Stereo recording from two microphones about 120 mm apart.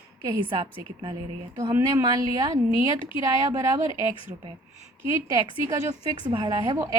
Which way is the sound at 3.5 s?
30° right (ahead or behind).